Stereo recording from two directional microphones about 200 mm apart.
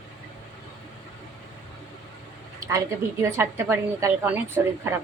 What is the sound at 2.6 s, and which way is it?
A woman's voice, 15° right (ahead or behind).